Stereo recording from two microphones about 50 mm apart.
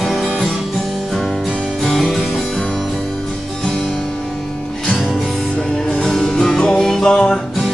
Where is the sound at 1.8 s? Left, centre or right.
Centre.